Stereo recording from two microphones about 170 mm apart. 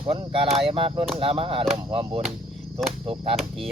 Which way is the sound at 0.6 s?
35° right (ahead or behind).